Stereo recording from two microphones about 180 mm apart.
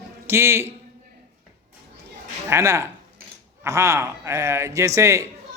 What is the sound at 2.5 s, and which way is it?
A man's voice, 15° right (ahead or behind).